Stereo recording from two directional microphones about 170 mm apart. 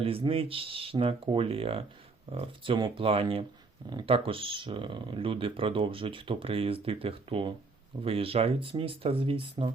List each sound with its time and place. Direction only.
0.0 s speech: 35° right (ahead or behind)